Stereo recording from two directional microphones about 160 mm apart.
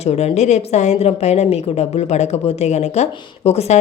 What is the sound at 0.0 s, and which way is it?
A woman's voice, 40° left (ahead or behind).